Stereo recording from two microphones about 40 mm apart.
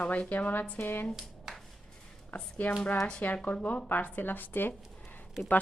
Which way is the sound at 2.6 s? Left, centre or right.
Left.